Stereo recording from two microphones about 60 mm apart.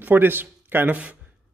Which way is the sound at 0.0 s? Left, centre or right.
Right.